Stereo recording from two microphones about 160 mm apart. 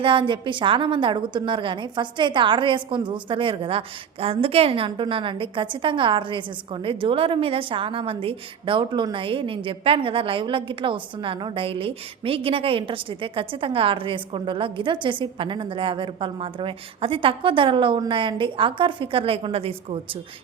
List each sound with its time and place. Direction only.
0.0 s a woman's voice: 30° right (ahead or behind)